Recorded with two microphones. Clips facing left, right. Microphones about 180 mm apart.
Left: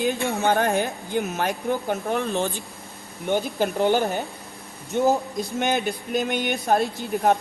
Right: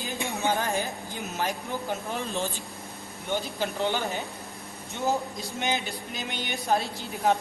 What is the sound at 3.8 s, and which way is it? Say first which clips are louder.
Speech: left 8 dB; 40° left (ahead or behind).